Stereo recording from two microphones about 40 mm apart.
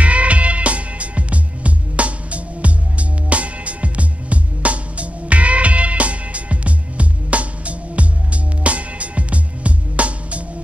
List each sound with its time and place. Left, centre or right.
0.0 s music: right